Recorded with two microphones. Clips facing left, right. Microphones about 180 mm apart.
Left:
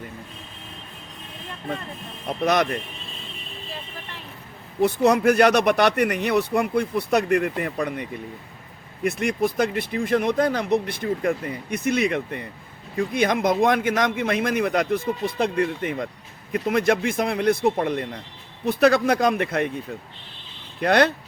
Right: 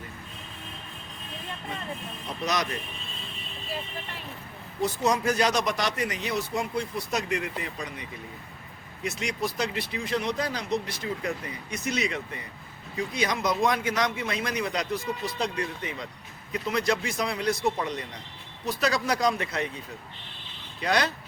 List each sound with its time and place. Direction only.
2.2 s speech: 55° left (ahead or behind)
4.8 s speech: 60° left (ahead or behind)
9.0 s speech: 55° left (ahead or behind)